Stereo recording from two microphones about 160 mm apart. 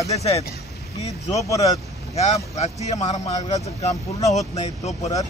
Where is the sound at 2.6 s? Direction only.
40° left (ahead or behind).